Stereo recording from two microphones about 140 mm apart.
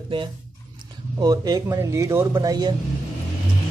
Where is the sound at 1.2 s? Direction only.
25° right (ahead or behind).